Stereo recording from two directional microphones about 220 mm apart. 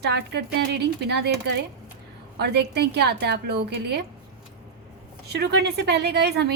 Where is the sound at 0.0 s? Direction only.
50° right (ahead or behind).